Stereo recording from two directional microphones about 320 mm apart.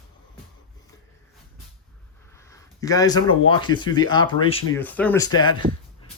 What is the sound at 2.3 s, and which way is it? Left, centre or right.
Speech, centre.